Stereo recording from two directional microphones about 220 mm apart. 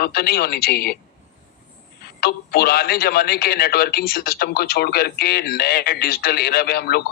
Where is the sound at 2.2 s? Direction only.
45° left (ahead or behind).